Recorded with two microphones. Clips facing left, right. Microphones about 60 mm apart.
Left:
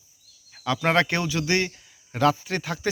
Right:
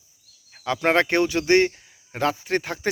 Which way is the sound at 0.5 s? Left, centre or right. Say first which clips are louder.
Right 1 dB; right.